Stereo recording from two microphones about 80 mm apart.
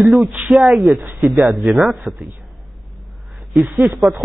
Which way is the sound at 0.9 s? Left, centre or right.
Right.